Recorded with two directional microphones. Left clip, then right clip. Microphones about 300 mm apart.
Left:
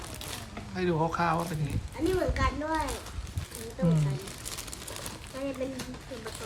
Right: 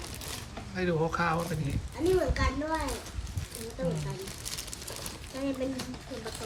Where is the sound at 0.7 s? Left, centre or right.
Centre.